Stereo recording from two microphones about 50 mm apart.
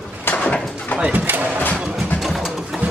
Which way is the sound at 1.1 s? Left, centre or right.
Right.